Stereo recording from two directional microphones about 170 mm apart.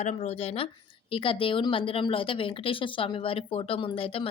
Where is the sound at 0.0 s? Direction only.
40° left (ahead or behind).